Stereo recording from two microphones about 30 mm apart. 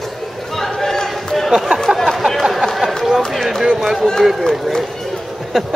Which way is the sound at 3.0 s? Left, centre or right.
Centre.